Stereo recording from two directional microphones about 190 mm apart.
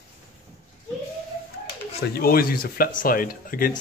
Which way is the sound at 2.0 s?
55° left (ahead or behind).